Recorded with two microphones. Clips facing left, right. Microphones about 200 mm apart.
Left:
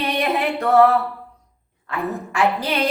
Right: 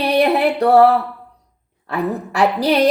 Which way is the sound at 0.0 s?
35° right (ahead or behind).